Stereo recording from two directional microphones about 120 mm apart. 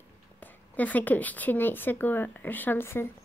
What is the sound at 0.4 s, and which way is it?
A woman's voice, 15° left (ahead or behind).